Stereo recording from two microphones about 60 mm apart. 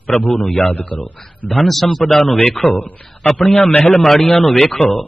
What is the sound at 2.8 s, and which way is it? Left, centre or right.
Speech, left.